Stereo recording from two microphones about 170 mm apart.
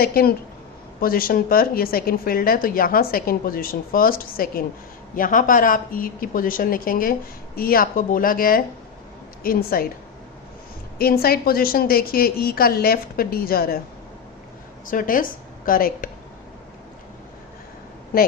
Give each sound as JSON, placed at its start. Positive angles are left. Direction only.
{"t": 0.0, "sound": "speech", "side_deg": 65}
{"t": 10.9, "sound": "speech", "side_deg": 65}
{"t": 14.8, "sound": "speech", "side_deg": 55}